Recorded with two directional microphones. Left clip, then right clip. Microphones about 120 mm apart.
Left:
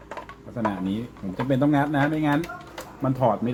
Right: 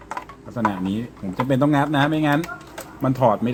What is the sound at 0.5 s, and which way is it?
Speech, 45° right (ahead or behind).